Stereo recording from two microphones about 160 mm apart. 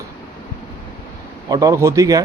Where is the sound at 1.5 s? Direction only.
20° right (ahead or behind).